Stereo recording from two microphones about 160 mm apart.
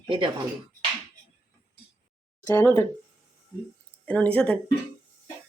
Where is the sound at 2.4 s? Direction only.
15° left (ahead or behind).